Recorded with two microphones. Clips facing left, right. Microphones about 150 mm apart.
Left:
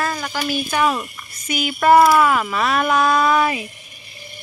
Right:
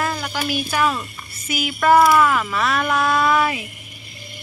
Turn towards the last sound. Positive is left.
turn(degrees=20)  # may be behind; listen again after turning